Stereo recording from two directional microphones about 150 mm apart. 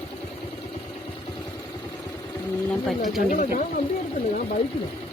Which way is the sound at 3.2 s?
55° left (ahead or behind).